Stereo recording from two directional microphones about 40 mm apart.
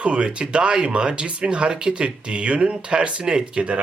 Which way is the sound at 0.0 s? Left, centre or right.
Right.